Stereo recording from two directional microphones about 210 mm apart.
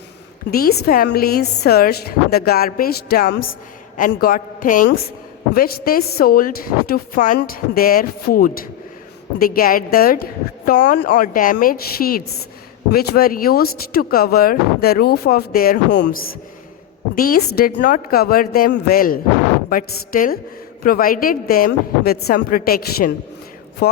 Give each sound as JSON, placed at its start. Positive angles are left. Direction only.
{"t": 0.5, "sound": "a woman's voice", "side_deg": 45}
{"t": 17.2, "sound": "a woman's voice", "side_deg": 45}